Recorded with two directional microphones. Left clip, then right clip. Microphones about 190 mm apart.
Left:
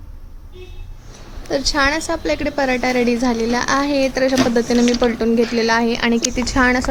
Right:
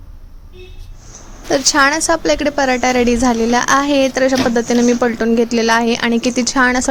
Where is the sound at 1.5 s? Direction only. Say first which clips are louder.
Right 5 dB; 35° right (ahead or behind).